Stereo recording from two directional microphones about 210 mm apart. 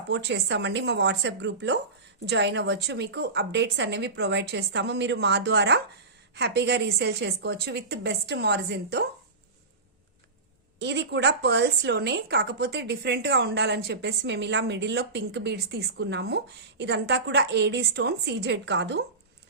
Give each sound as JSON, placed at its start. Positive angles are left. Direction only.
{"t": 0.1, "sound": "a woman's voice", "side_deg": -55}
{"t": 10.8, "sound": "a woman's voice", "side_deg": -55}